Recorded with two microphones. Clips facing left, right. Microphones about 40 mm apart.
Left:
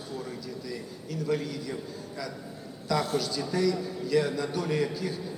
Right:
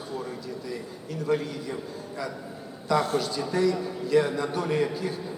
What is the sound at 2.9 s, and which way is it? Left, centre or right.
A man's voice, centre.